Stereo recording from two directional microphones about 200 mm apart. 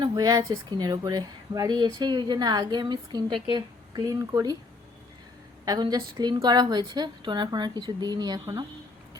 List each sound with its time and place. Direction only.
0.0 s a woman's voice: 20° right (ahead or behind)
5.6 s speech: 20° right (ahead or behind)